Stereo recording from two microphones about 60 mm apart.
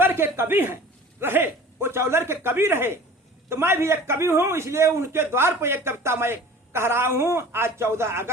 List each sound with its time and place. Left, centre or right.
0.0 s a man's voice: right